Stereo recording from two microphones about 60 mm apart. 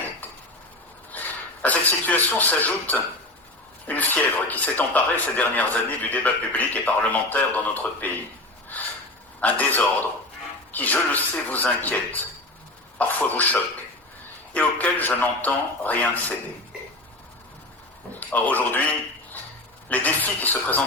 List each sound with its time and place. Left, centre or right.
1.1 s speech: left
9.4 s speech: left
18.2 s speech: left